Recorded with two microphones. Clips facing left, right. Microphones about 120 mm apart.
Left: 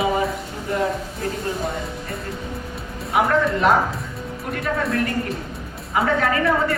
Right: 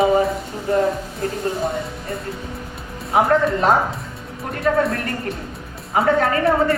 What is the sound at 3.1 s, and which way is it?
Speech, 35° right (ahead or behind).